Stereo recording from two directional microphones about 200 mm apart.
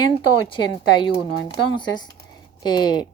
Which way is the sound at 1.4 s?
25° left (ahead or behind).